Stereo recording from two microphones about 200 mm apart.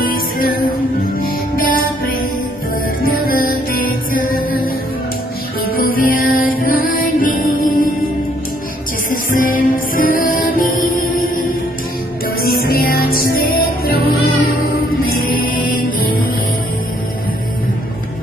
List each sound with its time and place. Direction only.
0.0 s music: 45° left (ahead or behind)
5.7 s music: 45° left (ahead or behind)
9.1 s music: 45° left (ahead or behind)